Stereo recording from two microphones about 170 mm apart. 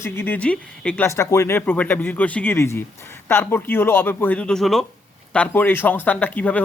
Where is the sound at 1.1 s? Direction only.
15° left (ahead or behind).